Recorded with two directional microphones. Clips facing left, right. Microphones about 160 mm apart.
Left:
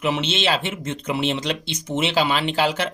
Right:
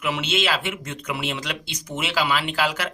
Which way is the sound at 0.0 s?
25° left (ahead or behind).